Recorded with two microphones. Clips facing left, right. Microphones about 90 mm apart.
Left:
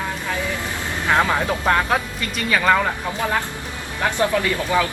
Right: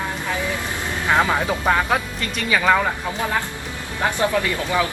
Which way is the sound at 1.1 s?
10° right (ahead or behind).